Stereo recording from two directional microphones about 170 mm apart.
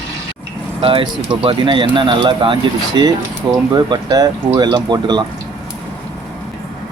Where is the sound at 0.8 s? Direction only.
30° right (ahead or behind).